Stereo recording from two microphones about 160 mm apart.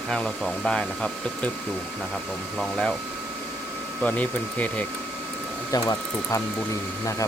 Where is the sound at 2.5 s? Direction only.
5° left (ahead or behind).